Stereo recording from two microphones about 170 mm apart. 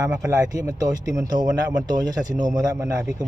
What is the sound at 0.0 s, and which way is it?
Speech, 20° right (ahead or behind).